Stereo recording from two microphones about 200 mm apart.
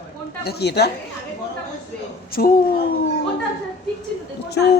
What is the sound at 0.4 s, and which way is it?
Speech, 55° left (ahead or behind).